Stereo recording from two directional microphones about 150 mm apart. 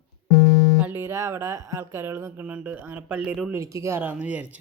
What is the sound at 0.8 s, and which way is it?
Speech, 15° right (ahead or behind).